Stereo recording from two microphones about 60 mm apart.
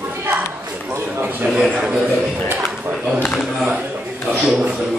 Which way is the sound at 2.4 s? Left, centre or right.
Right.